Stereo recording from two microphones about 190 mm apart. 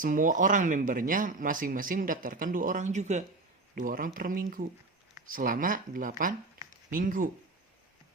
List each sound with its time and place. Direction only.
0.0 s speech: 45° right (ahead or behind)